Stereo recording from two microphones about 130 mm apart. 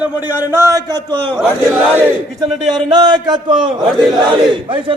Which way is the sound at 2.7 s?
35° right (ahead or behind).